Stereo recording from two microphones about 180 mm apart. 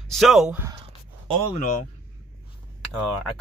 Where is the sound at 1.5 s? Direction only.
45° left (ahead or behind).